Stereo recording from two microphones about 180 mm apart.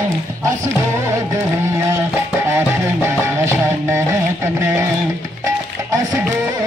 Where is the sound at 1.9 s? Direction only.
15° right (ahead or behind).